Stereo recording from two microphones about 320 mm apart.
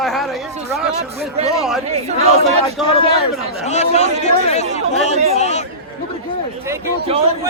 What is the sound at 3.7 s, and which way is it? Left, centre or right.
Speech, left.